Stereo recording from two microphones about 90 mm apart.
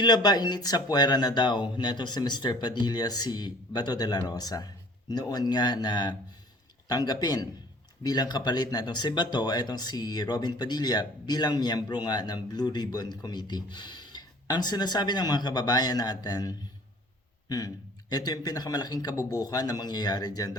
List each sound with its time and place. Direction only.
0.0 s speech: 50° left (ahead or behind)
18.1 s speech: 50° left (ahead or behind)